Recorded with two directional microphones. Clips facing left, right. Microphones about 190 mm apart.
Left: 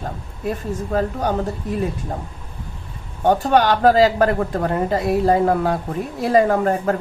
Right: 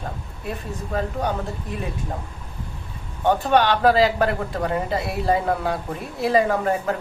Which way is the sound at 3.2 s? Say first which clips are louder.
Left 3 dB; 40° left (ahead or behind).